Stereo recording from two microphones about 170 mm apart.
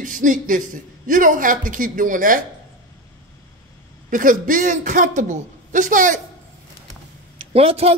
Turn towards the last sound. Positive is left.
turn(degrees=-35)  # may be behind; listen again after turning